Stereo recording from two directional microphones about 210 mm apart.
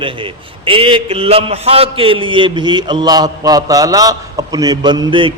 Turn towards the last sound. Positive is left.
turn(degrees=-25)  # may be behind; listen again after turning